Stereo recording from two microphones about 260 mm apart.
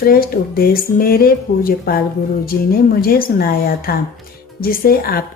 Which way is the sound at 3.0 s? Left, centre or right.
Left.